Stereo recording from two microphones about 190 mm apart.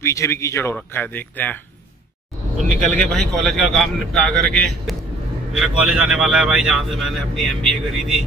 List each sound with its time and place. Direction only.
0.0 s speech: 15° left (ahead or behind)
2.6 s a man's voice: 40° right (ahead or behind)
2.9 s speech: 5° left (ahead or behind)